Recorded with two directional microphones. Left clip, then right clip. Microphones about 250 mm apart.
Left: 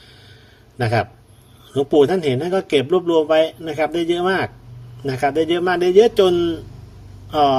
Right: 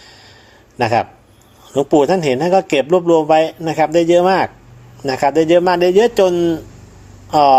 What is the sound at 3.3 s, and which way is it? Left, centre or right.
Speech, centre.